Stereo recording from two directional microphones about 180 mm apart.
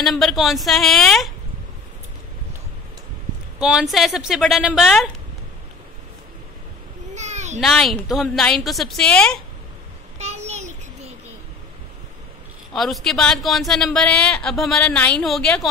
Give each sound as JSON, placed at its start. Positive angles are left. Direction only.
{"t": 0.0, "sound": "speech", "side_deg": 0}
{"t": 3.5, "sound": "speech", "side_deg": -5}
{"t": 7.2, "sound": "a sound", "side_deg": -40}
{"t": 7.6, "sound": "speech", "side_deg": 0}
{"t": 10.1, "sound": "a sound", "side_deg": -40}
{"t": 12.7, "sound": "speech", "side_deg": 0}